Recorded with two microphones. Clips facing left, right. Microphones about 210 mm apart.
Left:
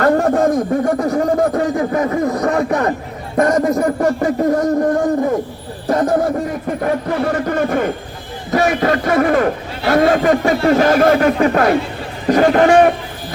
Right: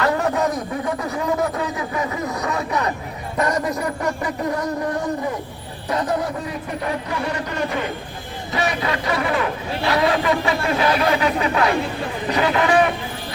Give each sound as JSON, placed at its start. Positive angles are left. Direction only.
{"t": 0.0, "sound": "a man's voice", "side_deg": 50}